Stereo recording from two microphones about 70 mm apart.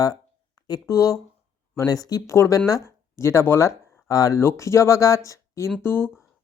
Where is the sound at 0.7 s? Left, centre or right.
Left.